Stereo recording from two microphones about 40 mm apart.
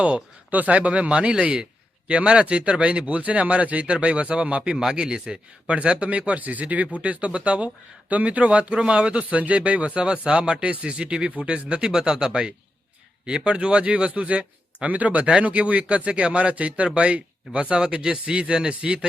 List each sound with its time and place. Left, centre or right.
0.0 s a man's voice: right
3.2 s a man's voice: right
5.6 s a man's voice: right